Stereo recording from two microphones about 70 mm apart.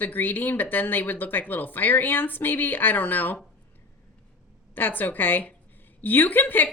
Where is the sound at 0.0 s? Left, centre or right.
Left.